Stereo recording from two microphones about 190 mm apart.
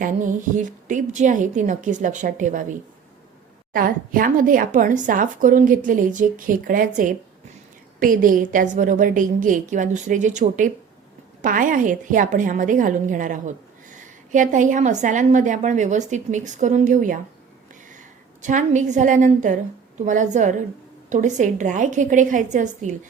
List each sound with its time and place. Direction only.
0.0 s a woman's voice: 45° right (ahead or behind)
18.4 s a woman's voice: 40° right (ahead or behind)